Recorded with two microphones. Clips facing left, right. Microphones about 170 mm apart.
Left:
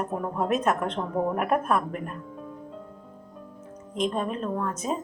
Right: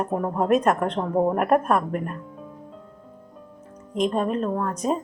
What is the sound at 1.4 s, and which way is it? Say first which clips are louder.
Speech: right 4 dB; 45° right (ahead or behind).